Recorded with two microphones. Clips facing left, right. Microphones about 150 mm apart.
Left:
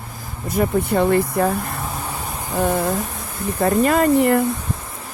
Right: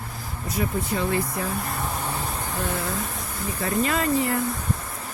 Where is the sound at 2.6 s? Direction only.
55° left (ahead or behind).